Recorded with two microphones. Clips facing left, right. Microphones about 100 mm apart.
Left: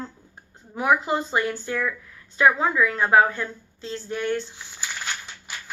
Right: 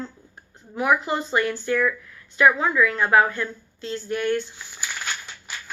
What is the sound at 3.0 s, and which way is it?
Speech, 35° left (ahead or behind).